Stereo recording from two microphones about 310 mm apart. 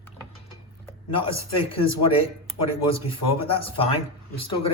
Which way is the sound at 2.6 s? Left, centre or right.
Centre.